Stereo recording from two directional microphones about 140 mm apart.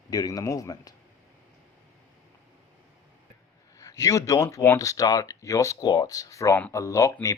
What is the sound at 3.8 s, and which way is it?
A man's voice, 25° left (ahead or behind).